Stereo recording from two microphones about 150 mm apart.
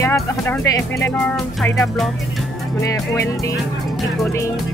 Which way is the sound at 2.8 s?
20° left (ahead or behind).